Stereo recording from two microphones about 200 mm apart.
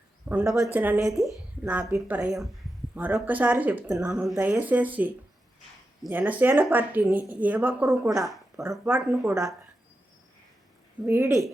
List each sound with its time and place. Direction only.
0.3 s speech: 5° right (ahead or behind)
11.0 s speech: 15° right (ahead or behind)